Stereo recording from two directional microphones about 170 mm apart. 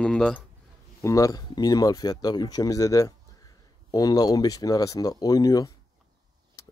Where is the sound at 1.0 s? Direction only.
20° left (ahead or behind).